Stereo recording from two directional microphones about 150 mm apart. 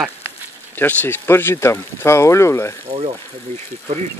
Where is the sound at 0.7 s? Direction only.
15° left (ahead or behind).